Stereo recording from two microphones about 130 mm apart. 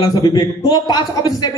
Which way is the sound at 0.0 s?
30° left (ahead or behind).